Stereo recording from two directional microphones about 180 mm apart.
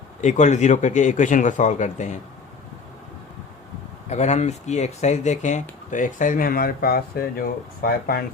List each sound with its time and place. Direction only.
0.2 s speech: 40° left (ahead or behind)
4.1 s speech: 40° left (ahead or behind); by 8.2 s 55° left (ahead or behind)